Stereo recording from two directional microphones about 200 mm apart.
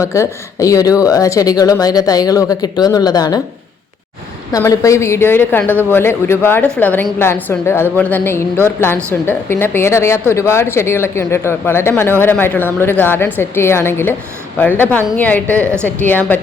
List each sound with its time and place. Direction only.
0.0 s a woman's voice: 15° left (ahead or behind)
4.5 s a woman's voice: 15° left (ahead or behind)